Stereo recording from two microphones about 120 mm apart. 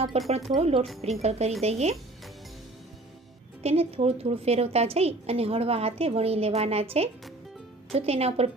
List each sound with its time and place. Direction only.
0.3 s a woman's voice: 60° right (ahead or behind)
3.6 s a woman's voice: 55° right (ahead or behind)